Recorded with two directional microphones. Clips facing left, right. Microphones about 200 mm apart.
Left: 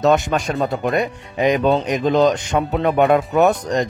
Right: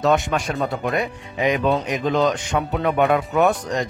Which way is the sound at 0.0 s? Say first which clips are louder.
Left 3 dB; 40° left (ahead or behind).